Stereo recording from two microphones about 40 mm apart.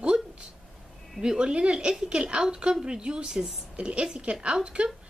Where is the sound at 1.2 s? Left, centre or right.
Right.